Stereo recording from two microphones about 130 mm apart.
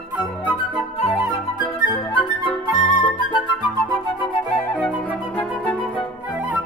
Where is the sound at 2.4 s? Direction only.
40° left (ahead or behind).